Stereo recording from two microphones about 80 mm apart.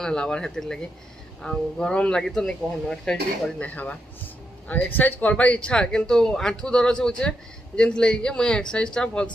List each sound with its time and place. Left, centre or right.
0.0 s speech: centre